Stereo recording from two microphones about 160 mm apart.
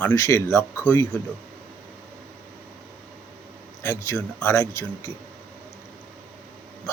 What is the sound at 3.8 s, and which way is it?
Speech, 15° left (ahead or behind).